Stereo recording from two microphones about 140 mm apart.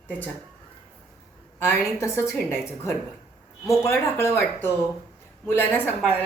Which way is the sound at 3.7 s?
20° left (ahead or behind).